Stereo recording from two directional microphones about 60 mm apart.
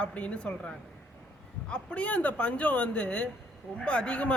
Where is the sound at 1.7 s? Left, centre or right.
Left.